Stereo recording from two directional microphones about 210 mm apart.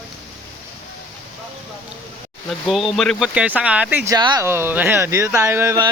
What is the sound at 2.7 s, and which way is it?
Speech, centre (ahead or behind).